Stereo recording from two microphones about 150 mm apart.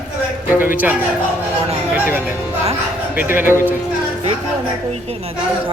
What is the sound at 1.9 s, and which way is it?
Speech, 15° right (ahead or behind).